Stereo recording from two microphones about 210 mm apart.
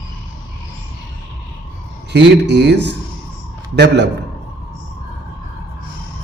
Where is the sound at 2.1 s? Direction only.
55° right (ahead or behind).